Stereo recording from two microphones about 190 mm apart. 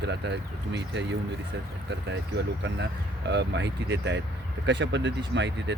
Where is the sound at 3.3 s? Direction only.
65° right (ahead or behind).